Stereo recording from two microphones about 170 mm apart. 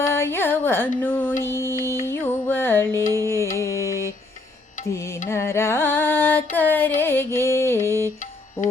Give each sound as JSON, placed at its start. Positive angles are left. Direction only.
{"t": 0.0, "sound": "carnatic music", "side_deg": 15}
{"t": 2.0, "sound": "music", "side_deg": 15}